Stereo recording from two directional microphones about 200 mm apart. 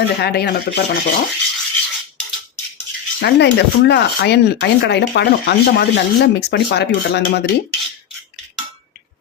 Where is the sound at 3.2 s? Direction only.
60° left (ahead or behind).